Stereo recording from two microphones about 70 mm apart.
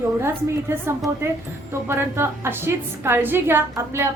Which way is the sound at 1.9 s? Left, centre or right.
Right.